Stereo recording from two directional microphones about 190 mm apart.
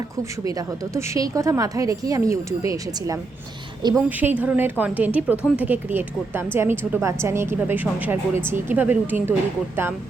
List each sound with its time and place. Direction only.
0.9 s a woman's voice: 15° right (ahead or behind)
4.2 s a woman's voice: 10° right (ahead or behind)